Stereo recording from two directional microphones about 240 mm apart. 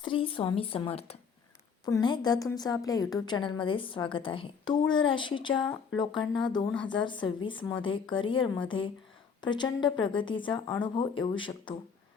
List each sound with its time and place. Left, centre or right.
0.0 s a woman's voice: left